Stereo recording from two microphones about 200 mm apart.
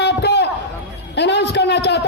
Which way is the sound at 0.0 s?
60° left (ahead or behind).